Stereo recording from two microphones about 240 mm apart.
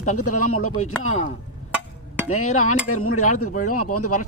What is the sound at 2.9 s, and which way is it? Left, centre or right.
Speech, left.